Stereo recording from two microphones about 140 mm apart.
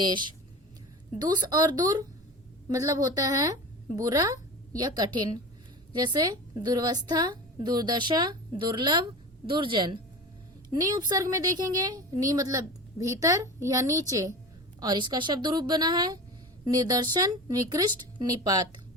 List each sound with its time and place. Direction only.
0.0 s a woman's voice: 35° right (ahead or behind)